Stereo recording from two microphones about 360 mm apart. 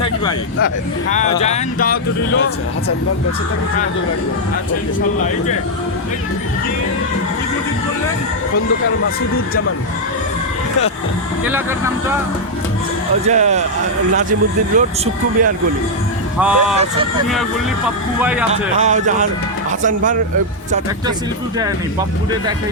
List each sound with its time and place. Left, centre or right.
1.1 s speech: centre
13.3 s speech: centre
14.8 s speech: right
16.4 s speech: centre
18.2 s speech: centre
18.5 s speech: centre